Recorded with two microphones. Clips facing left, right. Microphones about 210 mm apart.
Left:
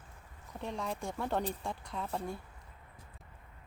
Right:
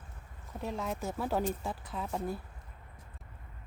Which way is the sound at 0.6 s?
5° right (ahead or behind).